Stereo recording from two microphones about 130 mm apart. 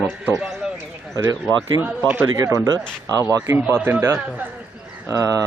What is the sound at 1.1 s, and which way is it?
Speech, 25° right (ahead or behind).